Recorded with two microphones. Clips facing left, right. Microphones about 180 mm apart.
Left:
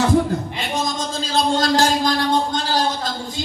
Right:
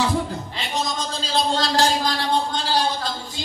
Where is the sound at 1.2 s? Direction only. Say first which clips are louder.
Left 4 dB; 45° left (ahead or behind).